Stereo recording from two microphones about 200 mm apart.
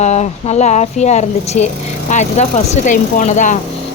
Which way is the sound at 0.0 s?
35° left (ahead or behind).